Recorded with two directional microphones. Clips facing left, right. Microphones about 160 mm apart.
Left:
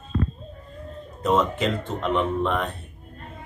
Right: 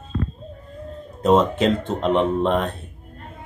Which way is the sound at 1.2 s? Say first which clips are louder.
Right 5 dB; 25° right (ahead or behind).